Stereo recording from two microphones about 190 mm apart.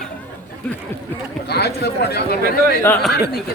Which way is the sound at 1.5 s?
60° left (ahead or behind).